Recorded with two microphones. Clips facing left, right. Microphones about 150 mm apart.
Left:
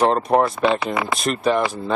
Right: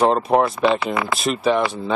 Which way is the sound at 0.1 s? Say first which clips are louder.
Even; centre (ahead or behind).